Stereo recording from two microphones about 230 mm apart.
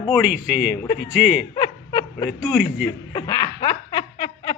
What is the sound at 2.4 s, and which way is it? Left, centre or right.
Speech, centre.